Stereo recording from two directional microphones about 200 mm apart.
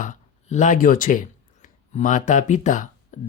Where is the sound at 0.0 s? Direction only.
40° left (ahead or behind).